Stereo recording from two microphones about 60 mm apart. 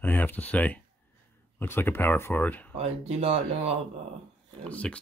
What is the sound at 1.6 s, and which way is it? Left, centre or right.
Speech, left.